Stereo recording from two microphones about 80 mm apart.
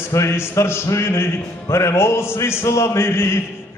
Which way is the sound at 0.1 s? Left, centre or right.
Left.